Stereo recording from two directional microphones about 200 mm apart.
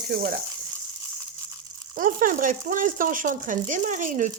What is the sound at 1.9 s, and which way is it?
Speech, 45° right (ahead or behind).